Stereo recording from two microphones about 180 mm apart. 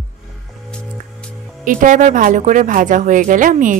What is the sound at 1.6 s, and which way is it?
A woman's voice, 45° right (ahead or behind).